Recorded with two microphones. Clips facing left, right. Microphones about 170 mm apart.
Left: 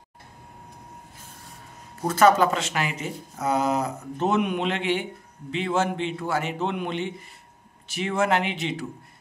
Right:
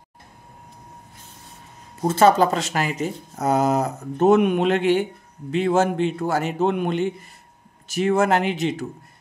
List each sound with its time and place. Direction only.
2.0 s speech: 30° right (ahead or behind)